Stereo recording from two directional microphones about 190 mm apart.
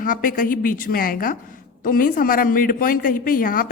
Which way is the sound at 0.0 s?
45° left (ahead or behind).